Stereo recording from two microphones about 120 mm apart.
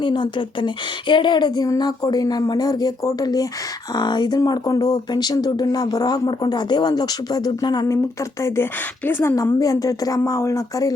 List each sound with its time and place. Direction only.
0.0 s speech: 40° left (ahead or behind)
9.0 s a woman's voice: 20° left (ahead or behind)